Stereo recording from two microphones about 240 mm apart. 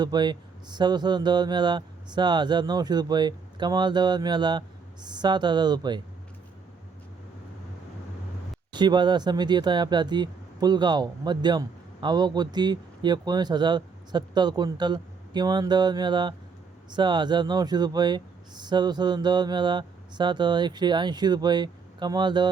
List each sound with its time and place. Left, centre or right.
0.0 s speech: centre
8.7 s speech: centre